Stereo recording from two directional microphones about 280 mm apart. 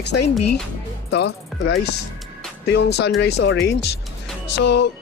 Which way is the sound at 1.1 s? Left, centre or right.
Left.